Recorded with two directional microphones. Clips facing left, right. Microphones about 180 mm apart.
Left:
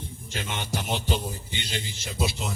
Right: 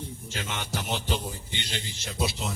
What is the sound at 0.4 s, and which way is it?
Speech, 25° left (ahead or behind).